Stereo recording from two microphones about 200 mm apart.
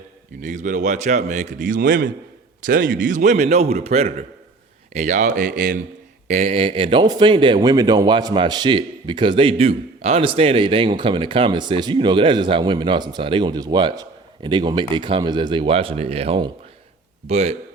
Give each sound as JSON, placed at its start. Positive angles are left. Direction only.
{"t": 0.4, "sound": "a man's voice", "side_deg": -40}